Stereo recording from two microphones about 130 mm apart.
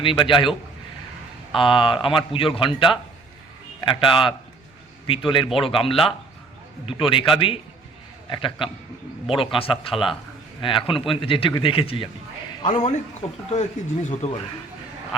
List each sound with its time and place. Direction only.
0.0 s a man's voice: 40° left (ahead or behind)
1.5 s a man's voice: 40° left (ahead or behind)
12.6 s a man's voice: 65° left (ahead or behind)